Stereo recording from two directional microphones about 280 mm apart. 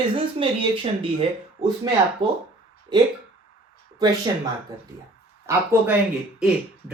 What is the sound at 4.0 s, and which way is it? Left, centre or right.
Speech, centre.